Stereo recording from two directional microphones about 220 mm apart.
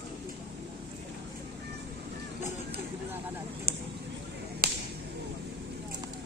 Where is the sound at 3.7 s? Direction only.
45° right (ahead or behind).